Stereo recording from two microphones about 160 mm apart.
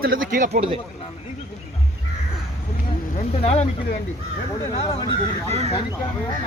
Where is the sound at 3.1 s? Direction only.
45° left (ahead or behind).